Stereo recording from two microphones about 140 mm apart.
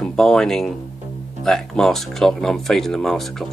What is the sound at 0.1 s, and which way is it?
Speech, 5° left (ahead or behind).